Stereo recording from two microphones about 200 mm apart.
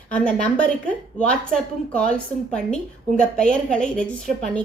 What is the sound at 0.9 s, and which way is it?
A woman's voice, 5° left (ahead or behind).